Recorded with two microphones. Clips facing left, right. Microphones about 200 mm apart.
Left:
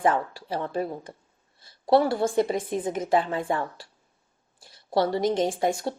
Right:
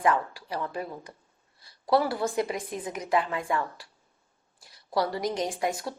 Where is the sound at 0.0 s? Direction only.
30° left (ahead or behind).